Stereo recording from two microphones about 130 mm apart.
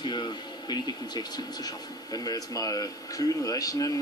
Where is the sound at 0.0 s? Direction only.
35° left (ahead or behind).